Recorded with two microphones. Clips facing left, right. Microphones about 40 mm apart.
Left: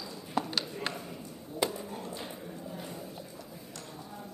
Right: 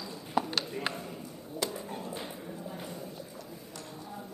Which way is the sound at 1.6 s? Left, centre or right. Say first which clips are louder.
Left 3 dB; centre.